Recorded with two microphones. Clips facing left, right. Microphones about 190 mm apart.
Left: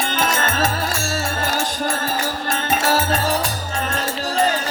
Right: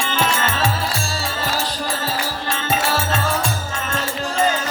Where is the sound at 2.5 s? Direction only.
35° left (ahead or behind).